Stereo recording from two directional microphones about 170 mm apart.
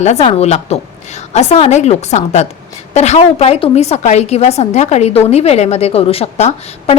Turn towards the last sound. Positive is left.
turn(degrees=40)  # may be behind; listen again after turning